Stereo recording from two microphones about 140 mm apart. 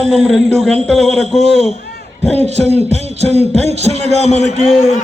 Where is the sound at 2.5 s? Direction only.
50° right (ahead or behind).